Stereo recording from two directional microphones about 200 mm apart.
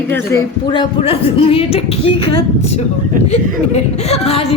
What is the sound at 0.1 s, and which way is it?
A woman's voice, 15° left (ahead or behind).